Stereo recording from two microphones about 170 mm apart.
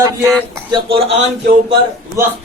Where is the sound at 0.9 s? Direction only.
35° right (ahead or behind).